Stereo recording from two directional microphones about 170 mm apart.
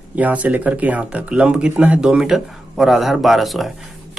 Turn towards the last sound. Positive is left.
turn(degrees=0)  # may be behind; listen again after turning